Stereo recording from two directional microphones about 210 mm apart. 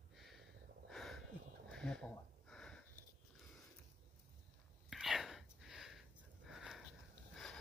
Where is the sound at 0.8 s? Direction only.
Centre (ahead or behind).